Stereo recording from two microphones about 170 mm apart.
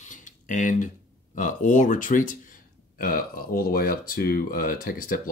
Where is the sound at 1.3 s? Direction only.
50° left (ahead or behind).